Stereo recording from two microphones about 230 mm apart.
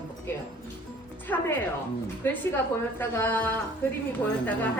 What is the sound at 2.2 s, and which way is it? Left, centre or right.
A woman's voice, centre.